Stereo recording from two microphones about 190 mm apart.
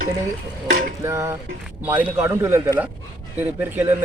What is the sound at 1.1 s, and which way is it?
Speech, 15° right (ahead or behind).